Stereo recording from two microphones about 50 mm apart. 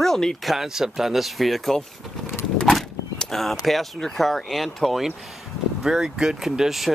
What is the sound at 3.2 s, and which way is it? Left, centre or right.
Speech, centre.